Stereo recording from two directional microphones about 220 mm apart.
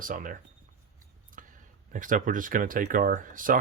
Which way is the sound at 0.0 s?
40° right (ahead or behind).